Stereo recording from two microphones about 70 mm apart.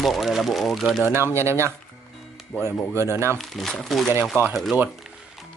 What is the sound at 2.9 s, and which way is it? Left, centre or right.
Speech, right.